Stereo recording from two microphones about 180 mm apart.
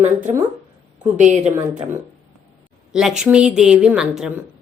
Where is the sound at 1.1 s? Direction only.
40° right (ahead or behind).